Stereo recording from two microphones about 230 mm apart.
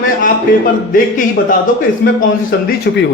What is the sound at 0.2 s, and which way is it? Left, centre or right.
Speech, left.